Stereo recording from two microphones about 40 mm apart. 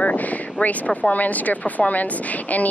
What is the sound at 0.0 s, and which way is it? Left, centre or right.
Speech, left.